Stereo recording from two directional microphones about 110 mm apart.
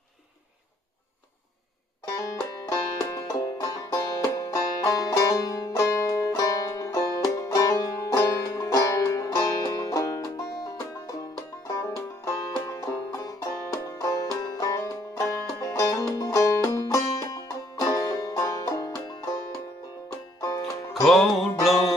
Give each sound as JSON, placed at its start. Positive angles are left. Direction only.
{"t": 2.0, "sound": "banjo", "side_deg": 30}
{"t": 15.6, "sound": "music", "side_deg": 30}
{"t": 20.3, "sound": "music", "side_deg": 35}
{"t": 20.9, "sound": "music", "side_deg": 0}